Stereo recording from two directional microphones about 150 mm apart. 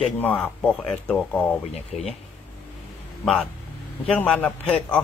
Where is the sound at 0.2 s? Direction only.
10° left (ahead or behind).